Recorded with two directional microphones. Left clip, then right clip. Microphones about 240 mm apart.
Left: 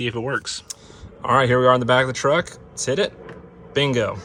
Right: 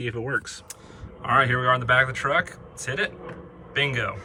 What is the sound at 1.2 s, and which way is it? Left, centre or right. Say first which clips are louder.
A man's voice: left 5 dB; centre.